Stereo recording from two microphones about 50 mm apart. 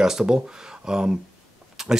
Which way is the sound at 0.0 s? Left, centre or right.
Centre.